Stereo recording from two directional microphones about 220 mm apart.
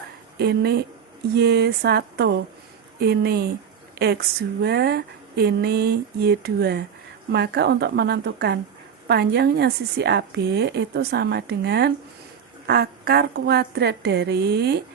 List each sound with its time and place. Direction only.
0.3 s speech: 45° right (ahead or behind)